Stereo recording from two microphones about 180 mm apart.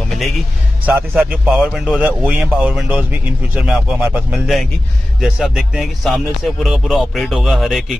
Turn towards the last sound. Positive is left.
turn(degrees=0)  # may be behind; listen again after turning